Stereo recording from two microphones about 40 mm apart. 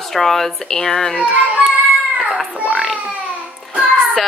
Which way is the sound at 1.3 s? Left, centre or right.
Right.